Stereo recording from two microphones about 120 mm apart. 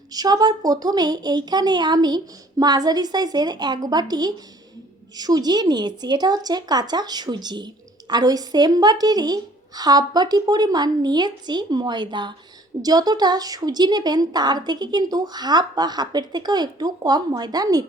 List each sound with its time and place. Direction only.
0.1 s a woman's voice: 35° right (ahead or behind)